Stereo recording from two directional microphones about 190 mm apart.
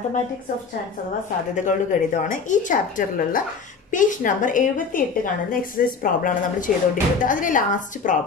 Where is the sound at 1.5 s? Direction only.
40° left (ahead or behind).